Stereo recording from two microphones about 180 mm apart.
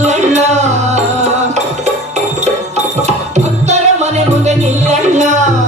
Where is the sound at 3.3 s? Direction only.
40° right (ahead or behind).